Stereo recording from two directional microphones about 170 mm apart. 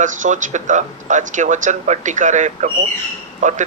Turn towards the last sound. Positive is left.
turn(degrees=-45)  # may be behind; listen again after turning